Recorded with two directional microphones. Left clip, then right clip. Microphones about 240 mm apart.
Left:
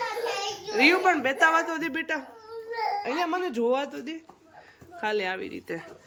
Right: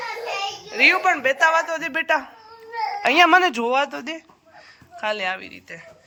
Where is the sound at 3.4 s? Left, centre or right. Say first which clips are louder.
Right 6 dB; centre.